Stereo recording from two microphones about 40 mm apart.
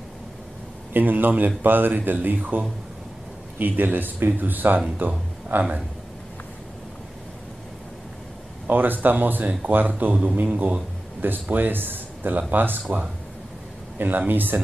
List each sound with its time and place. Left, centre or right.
0.9 s speech: right
8.6 s a man's voice: right
13.9 s speech: right